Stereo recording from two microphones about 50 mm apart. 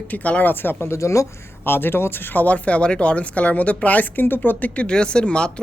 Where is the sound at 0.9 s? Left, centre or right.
Left.